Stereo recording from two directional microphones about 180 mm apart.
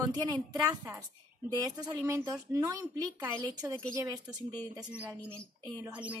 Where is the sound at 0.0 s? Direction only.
20° right (ahead or behind).